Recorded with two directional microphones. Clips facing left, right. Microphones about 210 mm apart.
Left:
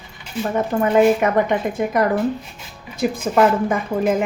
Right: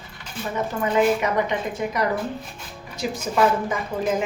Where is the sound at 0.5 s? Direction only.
50° left (ahead or behind).